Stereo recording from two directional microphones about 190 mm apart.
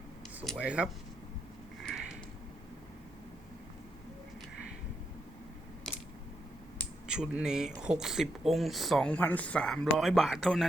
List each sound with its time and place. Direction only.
0.4 s speech: centre (ahead or behind)
1.8 s a sound: centre (ahead or behind)
7.1 s speech: 5° right (ahead or behind)